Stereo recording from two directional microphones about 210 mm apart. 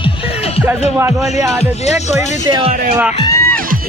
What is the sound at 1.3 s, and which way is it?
Speech, 15° right (ahead or behind).